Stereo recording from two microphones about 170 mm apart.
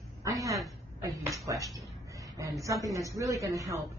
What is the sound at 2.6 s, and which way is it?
Speech, 20° right (ahead or behind).